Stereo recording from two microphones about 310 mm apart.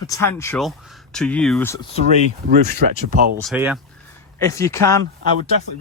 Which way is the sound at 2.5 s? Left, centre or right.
Right.